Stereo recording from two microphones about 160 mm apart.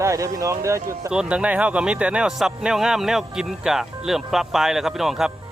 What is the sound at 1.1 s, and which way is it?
Speech, 5° right (ahead or behind).